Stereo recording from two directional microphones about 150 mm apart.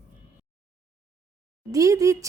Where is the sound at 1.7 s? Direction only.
20° right (ahead or behind).